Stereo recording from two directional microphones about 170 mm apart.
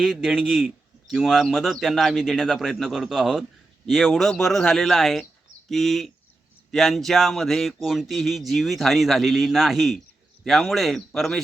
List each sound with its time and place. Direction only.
0.0 s speech: centre (ahead or behind)